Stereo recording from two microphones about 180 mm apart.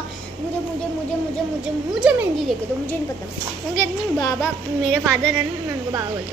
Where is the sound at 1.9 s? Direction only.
5° right (ahead or behind).